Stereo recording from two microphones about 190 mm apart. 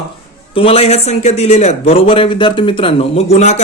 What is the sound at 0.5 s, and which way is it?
A man's voice, 30° left (ahead or behind).